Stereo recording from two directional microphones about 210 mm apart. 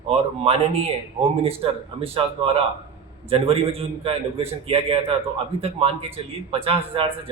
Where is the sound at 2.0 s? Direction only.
25° right (ahead or behind).